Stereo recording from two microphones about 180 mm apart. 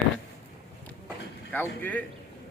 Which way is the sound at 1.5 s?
10° left (ahead or behind).